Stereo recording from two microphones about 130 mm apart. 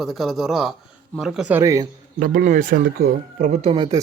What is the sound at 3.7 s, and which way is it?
Speech, 35° right (ahead or behind).